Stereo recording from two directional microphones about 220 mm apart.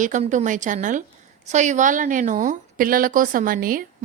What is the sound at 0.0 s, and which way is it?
A woman's voice, 35° right (ahead or behind).